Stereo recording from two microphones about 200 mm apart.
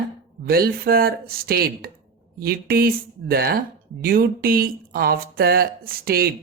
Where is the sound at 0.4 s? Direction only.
50° right (ahead or behind).